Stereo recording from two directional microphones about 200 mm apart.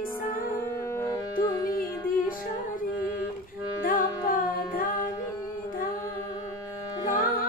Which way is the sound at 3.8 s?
45° left (ahead or behind).